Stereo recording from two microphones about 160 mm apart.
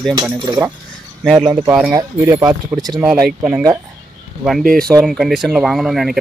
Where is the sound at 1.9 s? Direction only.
20° right (ahead or behind).